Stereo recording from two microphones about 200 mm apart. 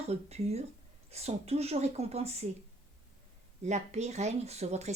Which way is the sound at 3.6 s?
35° right (ahead or behind).